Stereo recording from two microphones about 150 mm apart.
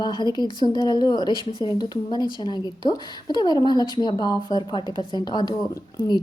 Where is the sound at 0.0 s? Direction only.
30° left (ahead or behind).